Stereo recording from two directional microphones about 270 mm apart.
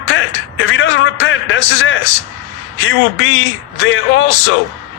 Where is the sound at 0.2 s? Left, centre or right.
Left.